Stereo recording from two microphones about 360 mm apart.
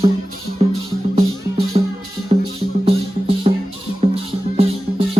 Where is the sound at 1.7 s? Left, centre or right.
Centre.